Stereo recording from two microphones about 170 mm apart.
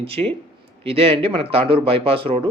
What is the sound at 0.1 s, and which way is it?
Speech, 35° right (ahead or behind).